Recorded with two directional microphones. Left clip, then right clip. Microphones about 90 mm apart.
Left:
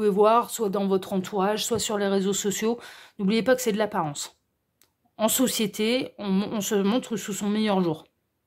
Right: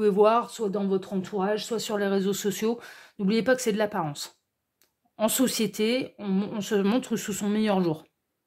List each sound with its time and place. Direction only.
0.0 s speech: 20° left (ahead or behind)
0.5 s speech: 50° left (ahead or behind); by 1.4 s 70° left (ahead or behind)
1.4 s speech: 50° left (ahead or behind)
1.8 s speech: 25° left (ahead or behind)
6.1 s speech: 60° left (ahead or behind)
6.8 s a woman's voice: 15° left (ahead or behind)